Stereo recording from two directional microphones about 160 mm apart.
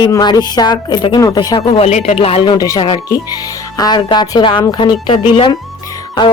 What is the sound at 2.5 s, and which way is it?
Speech, 20° left (ahead or behind).